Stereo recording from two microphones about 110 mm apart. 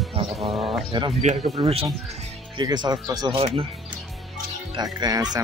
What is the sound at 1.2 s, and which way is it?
Speech, 90° right.